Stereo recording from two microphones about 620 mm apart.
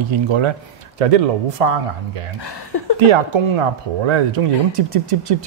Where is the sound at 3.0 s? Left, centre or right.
Right.